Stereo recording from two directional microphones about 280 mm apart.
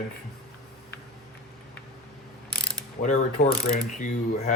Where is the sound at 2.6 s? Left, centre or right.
Left.